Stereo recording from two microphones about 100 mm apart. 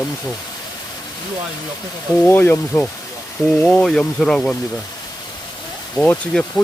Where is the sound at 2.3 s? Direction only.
20° left (ahead or behind).